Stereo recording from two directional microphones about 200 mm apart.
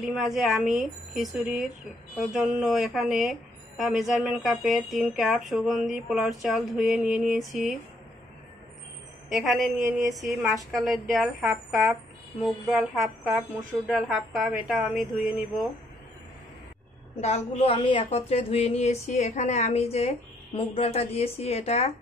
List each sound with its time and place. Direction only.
0.0 s a woman's voice: centre (ahead or behind)
9.3 s a woman's voice: centre (ahead or behind)
17.2 s a woman's voice: 30° left (ahead or behind)